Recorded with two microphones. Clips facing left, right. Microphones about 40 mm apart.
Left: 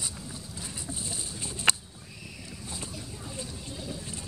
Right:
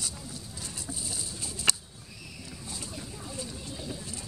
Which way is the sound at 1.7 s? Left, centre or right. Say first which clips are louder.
Left 3 dB; left.